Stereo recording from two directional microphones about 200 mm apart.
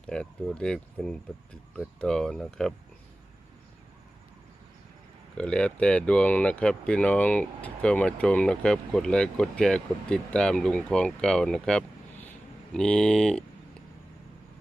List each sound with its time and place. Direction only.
0.0 s speech: 5° left (ahead or behind)
5.4 s speech: 5° left (ahead or behind)